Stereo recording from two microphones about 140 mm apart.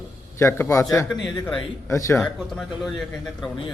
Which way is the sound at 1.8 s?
20° left (ahead or behind).